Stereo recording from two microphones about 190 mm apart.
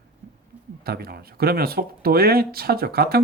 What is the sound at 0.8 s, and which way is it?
Speech, 55° right (ahead or behind).